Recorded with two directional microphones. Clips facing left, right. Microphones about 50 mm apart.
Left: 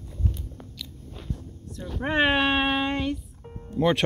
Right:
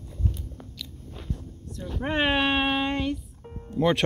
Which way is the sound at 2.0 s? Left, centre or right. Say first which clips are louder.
Left 2 dB; left.